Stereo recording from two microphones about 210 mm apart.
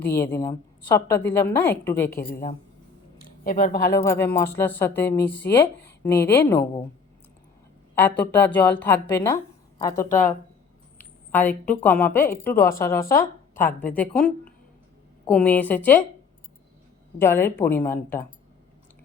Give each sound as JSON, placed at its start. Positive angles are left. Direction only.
{"t": 0.0, "sound": "a woman's voice", "side_deg": 10}
{"t": 2.0, "sound": "a woman's voice", "side_deg": 45}
{"t": 3.2, "sound": "a sound", "side_deg": 45}
{"t": 4.4, "sound": "a woman's voice", "side_deg": 10}
{"t": 7.9, "sound": "a woman's voice", "side_deg": 10}
{"t": 17.2, "sound": "a woman's voice", "side_deg": 10}